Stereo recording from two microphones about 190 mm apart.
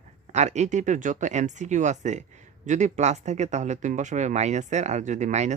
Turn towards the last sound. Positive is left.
turn(degrees=-40)  # may be behind; listen again after turning